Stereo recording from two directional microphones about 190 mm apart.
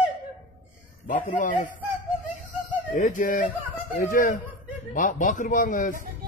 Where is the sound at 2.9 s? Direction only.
45° left (ahead or behind).